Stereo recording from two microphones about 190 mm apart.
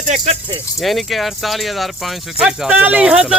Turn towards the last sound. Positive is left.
turn(degrees=-5)  # may be behind; listen again after turning